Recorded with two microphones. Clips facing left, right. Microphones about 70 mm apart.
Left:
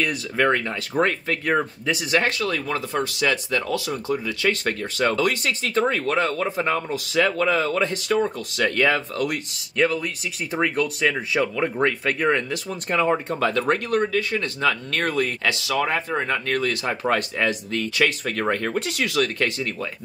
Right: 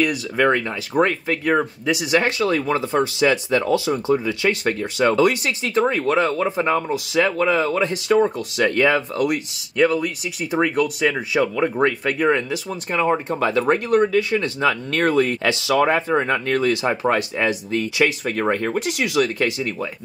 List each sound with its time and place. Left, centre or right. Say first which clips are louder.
0.0 s speech: right 3 dB; centre
11.7 s speech: right 3 dB; centre
12.2 s speech: right 5 dB; centre